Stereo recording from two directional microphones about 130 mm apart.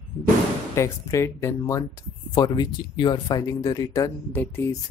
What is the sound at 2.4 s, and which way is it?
Speech, 35° left (ahead or behind).